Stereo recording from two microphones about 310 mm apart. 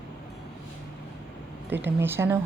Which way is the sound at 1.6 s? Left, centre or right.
Centre.